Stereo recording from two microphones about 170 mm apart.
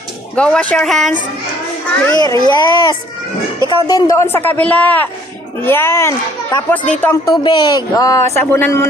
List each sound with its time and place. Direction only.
0.3 s speech: 5° left (ahead or behind)
2.1 s a man's voice: 25° left (ahead or behind)
7.4 s a man's voice: 25° left (ahead or behind)